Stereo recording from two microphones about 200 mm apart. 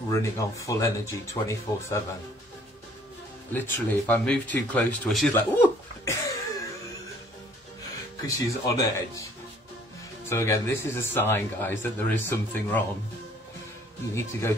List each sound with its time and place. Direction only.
0.1 s speech: 15° left (ahead or behind)
3.5 s speech: 10° left (ahead or behind)
8.3 s speech: 15° left (ahead or behind)
10.3 s speech: 15° left (ahead or behind)